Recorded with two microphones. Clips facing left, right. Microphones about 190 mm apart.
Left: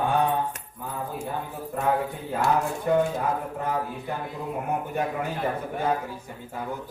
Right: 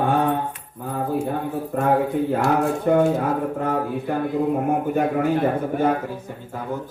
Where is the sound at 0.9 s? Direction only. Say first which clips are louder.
Right 10 dB; 60° right (ahead or behind).